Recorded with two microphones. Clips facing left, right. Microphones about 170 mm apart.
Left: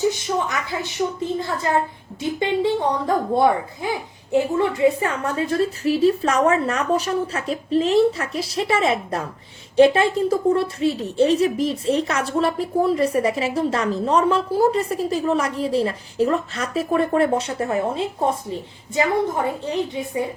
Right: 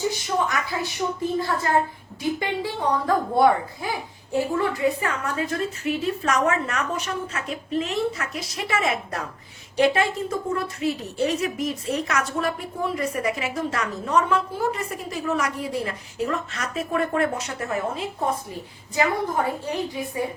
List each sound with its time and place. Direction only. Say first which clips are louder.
0.0 s a woman's voice: left 3 dB; 20° left (ahead or behind)
19.6 s a woman's voice: left 3 dB; 25° left (ahead or behind)